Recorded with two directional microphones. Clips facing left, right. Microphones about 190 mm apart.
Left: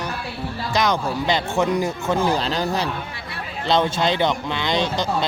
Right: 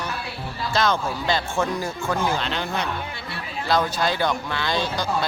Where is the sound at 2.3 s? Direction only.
35° left (ahead or behind).